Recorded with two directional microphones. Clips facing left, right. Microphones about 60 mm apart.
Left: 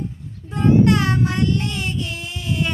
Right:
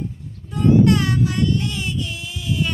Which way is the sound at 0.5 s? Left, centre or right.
Left.